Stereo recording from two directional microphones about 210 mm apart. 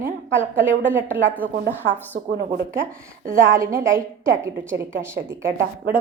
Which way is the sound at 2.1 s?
35° right (ahead or behind).